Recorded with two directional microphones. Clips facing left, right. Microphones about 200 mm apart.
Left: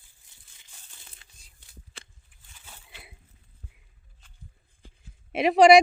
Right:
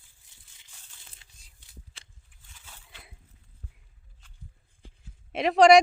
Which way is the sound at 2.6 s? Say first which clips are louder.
Left 2 dB; 15° left (ahead or behind).